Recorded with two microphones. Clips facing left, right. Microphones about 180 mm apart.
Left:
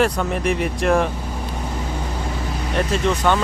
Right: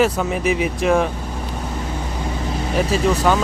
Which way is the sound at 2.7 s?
5° right (ahead or behind).